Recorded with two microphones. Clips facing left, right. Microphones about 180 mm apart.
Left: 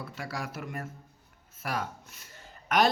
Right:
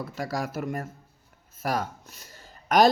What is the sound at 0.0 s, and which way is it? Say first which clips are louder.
Speech: right 6 dB; 40° right (ahead or behind).